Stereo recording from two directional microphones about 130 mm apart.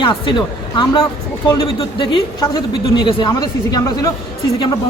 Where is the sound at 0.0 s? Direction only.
40° left (ahead or behind).